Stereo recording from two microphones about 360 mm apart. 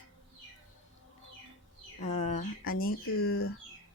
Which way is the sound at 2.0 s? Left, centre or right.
Centre.